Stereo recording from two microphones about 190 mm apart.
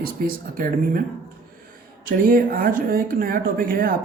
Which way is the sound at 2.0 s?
50° right (ahead or behind).